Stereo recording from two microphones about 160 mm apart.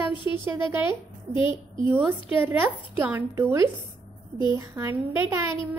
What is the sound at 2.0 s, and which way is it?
A woman's voice, 10° right (ahead or behind).